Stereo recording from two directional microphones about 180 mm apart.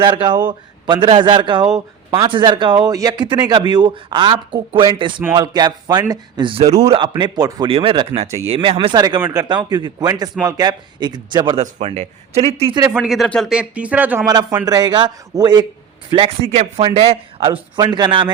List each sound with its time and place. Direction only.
0.0 s a man's voice: 25° right (ahead or behind)
11.6 s a man's voice: 40° right (ahead or behind)
12.8 s speech: 10° right (ahead or behind)
14.3 s a man's voice: 20° right (ahead or behind)
16.5 s a man's voice: 35° right (ahead or behind)